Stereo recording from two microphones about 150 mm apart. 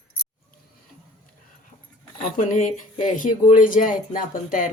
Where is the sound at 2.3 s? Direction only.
55° left (ahead or behind).